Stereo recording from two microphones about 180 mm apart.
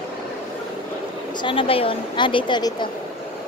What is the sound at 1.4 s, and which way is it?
Speech, 30° left (ahead or behind).